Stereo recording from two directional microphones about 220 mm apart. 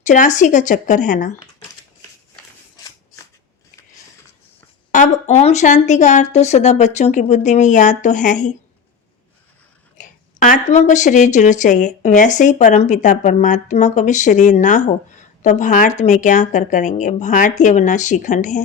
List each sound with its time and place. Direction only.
0.0 s speech: 35° left (ahead or behind)
4.9 s speech: 35° left (ahead or behind)
10.0 s speech: 35° left (ahead or behind)